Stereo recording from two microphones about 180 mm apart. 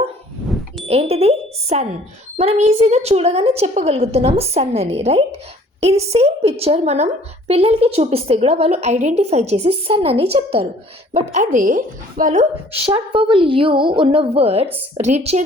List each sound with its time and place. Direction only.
0.9 s a woman's voice: 35° right (ahead or behind)
11.1 s a woman's voice: 45° right (ahead or behind)
12.9 s a woman's voice: 30° right (ahead or behind)